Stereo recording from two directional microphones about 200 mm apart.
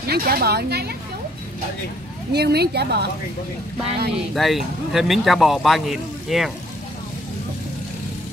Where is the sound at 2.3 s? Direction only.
55° right (ahead or behind).